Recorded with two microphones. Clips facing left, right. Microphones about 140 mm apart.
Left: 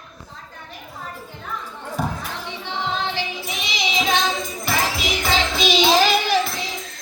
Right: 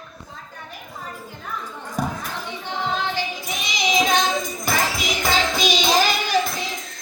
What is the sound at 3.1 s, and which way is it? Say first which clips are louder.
Music: right 1 dB; 45° right (ahead or behind).